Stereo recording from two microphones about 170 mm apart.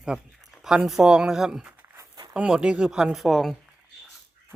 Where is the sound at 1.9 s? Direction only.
25° right (ahead or behind).